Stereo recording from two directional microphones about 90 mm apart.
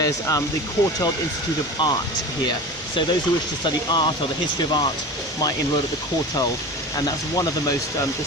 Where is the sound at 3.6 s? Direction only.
55° left (ahead or behind).